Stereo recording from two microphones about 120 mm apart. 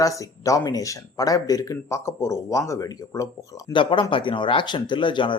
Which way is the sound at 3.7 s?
45° left (ahead or behind).